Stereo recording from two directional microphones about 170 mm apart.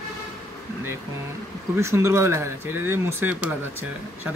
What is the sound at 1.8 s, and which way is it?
Speech, 15° right (ahead or behind).